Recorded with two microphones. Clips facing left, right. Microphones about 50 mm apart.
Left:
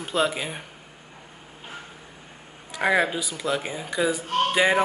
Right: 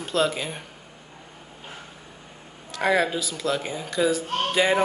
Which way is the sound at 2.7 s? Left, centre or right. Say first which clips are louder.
Even; centre.